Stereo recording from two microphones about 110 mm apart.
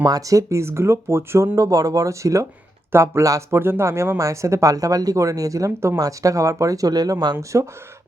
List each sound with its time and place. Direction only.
0.0 s speech: 35° right (ahead or behind)
7.3 s speech: 25° right (ahead or behind)